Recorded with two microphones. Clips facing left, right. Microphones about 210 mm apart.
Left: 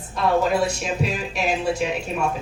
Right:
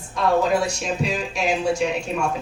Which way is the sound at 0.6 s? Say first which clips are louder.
Left 1 dB; 5° left (ahead or behind).